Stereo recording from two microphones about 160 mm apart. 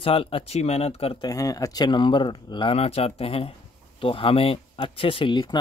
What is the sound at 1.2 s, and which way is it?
Speech, 20° left (ahead or behind).